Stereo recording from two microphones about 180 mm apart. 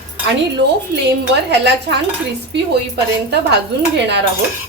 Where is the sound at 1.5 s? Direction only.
70° right (ahead or behind).